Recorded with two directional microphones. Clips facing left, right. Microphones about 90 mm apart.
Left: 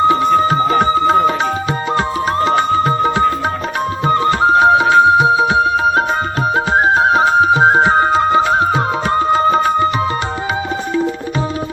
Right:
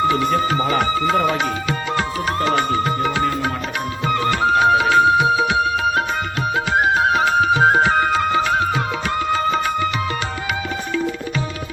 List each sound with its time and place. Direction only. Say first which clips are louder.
0.0 s music: left 6 dB; 30° left (ahead or behind)